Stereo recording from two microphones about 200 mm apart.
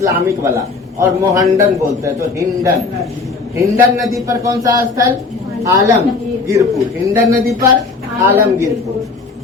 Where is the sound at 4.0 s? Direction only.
Centre (ahead or behind).